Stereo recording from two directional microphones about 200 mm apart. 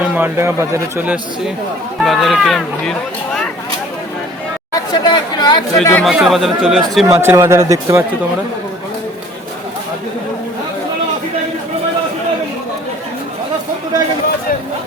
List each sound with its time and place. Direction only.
0.1 s a man's voice: 10° right (ahead or behind)
4.7 s speech: 20° left (ahead or behind)
5.7 s speech: 5° left (ahead or behind)
7.1 s a man's voice: 15° right (ahead or behind)